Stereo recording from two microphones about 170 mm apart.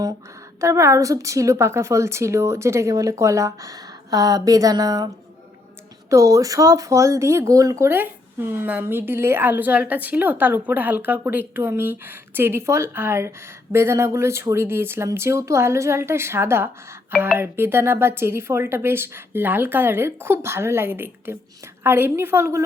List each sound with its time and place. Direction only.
0.6 s a woman's voice: 15° right (ahead or behind)
6.1 s speech: 20° right (ahead or behind)